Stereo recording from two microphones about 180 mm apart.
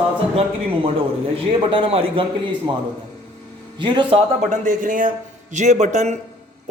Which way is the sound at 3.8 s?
25° right (ahead or behind).